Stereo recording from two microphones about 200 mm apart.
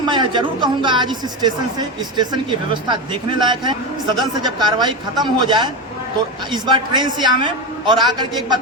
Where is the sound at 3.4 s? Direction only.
20° right (ahead or behind).